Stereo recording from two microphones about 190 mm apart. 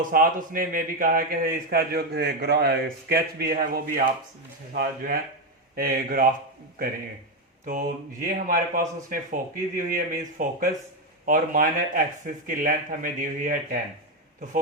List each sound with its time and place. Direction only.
0.1 s a man's voice: 45° right (ahead or behind)
7.6 s a man's voice: 45° right (ahead or behind)